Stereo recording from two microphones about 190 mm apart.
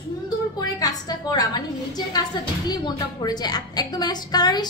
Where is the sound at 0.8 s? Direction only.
20° left (ahead or behind).